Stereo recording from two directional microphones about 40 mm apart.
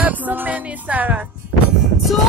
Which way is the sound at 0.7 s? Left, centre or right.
Right.